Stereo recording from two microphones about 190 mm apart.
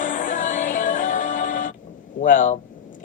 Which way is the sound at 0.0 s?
45° left (ahead or behind).